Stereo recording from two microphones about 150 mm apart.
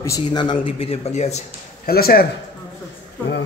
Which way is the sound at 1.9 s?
90° left.